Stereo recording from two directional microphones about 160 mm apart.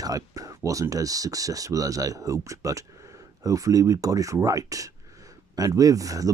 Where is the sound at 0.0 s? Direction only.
20° right (ahead or behind).